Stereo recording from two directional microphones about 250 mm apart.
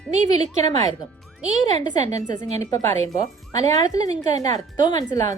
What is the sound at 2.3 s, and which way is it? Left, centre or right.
Speech, centre.